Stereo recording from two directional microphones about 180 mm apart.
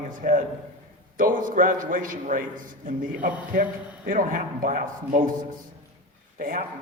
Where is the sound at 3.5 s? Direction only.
50° right (ahead or behind).